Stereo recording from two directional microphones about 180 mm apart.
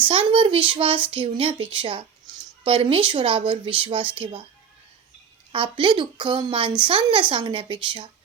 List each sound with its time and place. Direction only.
0.0 s a woman's voice: 30° right (ahead or behind)
5.5 s a woman's voice: 30° right (ahead or behind)